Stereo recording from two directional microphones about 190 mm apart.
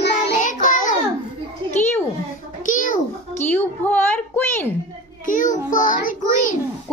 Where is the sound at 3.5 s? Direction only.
10° left (ahead or behind).